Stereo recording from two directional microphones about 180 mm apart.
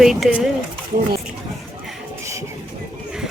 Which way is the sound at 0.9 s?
50° right (ahead or behind).